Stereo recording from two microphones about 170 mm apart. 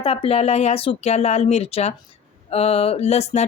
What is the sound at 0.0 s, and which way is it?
Speech, 35° left (ahead or behind).